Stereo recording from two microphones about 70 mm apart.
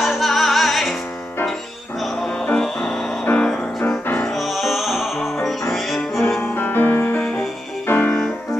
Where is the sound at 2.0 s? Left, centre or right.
Centre.